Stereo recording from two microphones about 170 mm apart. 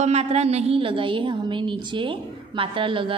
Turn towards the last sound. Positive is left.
turn(degrees=-30)  # may be behind; listen again after turning